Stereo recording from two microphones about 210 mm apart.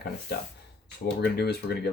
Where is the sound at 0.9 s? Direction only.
50° left (ahead or behind).